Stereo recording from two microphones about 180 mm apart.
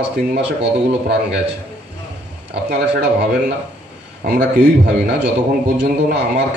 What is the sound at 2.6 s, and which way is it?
Speech, 65° right (ahead or behind).